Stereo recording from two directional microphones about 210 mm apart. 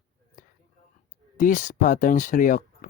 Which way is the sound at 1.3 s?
40° left (ahead or behind).